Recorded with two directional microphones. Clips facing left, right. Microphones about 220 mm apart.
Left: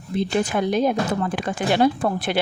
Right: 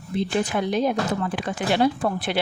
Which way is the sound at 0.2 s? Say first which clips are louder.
Left 2 dB; 50° left (ahead or behind).